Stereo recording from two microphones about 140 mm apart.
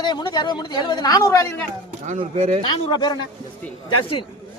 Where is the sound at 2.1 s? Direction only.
55° right (ahead or behind).